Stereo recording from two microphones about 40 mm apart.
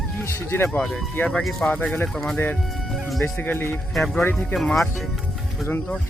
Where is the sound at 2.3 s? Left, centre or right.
Left.